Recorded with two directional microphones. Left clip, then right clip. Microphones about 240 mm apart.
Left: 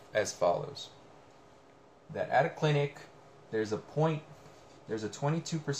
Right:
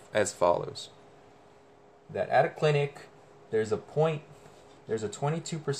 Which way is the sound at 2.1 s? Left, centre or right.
Right.